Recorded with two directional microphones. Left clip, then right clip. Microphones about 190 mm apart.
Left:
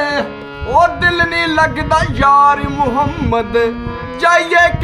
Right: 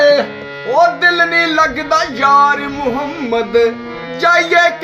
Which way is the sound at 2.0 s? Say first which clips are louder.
Even; 10° left (ahead or behind).